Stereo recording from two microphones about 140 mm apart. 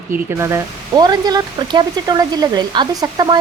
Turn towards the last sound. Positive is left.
turn(degrees=-30)  # may be behind; listen again after turning